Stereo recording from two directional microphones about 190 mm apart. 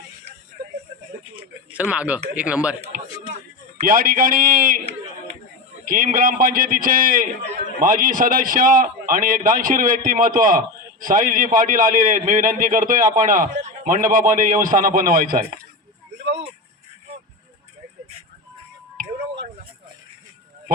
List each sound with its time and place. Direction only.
1.9 s speech: 5° right (ahead or behind)
2.9 s a sound: 45° right (ahead or behind)
3.8 s a man's voice: 45° right (ahead or behind)